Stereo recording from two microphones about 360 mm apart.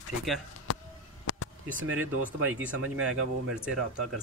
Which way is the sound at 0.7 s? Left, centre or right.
Left.